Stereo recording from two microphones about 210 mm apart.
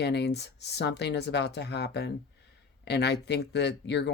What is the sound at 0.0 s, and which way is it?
Speech, 55° left (ahead or behind).